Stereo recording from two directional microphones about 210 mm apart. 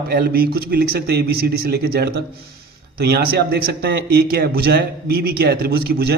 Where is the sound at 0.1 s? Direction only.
45° right (ahead or behind).